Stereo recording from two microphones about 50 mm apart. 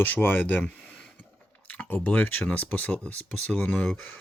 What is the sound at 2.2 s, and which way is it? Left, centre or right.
Speech, left.